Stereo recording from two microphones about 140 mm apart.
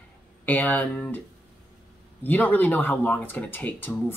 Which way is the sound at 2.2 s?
10° left (ahead or behind).